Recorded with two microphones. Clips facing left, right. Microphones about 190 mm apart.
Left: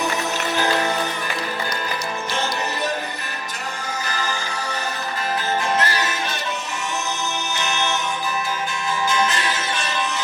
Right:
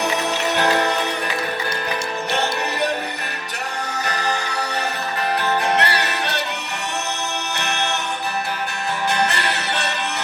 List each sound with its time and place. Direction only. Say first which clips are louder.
0.5 s music: right 2 dB; 65° right (ahead or behind)
4.0 s music: right 4 dB; 65° right (ahead or behind)
5.4 s music: right 2 dB; 65° right (ahead or behind)
7.5 s music: left 1 dB; 65° right (ahead or behind)
9.0 s music: right 1 dB; 65° right (ahead or behind)